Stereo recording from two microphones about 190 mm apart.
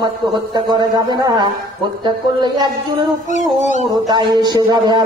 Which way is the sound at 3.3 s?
40° left (ahead or behind).